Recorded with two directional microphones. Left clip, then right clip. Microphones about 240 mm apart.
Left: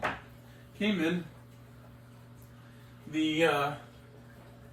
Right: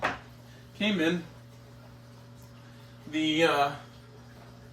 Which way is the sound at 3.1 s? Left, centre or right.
Centre.